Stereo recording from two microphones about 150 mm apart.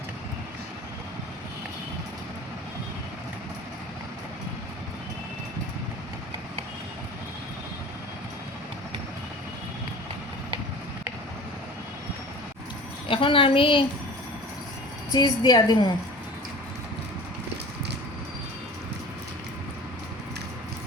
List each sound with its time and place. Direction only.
13.1 s a woman's voice: 35° left (ahead or behind)
15.1 s a woman's voice: 30° left (ahead or behind)